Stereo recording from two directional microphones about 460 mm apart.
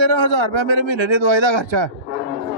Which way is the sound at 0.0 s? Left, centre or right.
Right.